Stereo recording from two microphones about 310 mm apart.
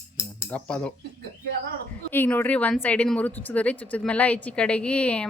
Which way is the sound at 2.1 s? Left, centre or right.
Centre.